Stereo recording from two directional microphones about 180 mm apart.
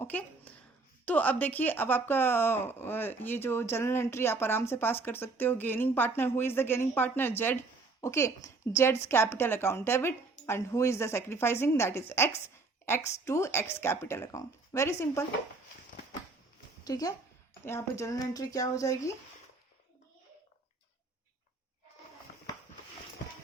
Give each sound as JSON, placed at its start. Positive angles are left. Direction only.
{"t": 0.0, "sound": "a sound", "side_deg": 10}
{"t": 1.0, "sound": "speech", "side_deg": 10}
{"t": 16.8, "sound": "a woman's voice", "side_deg": 20}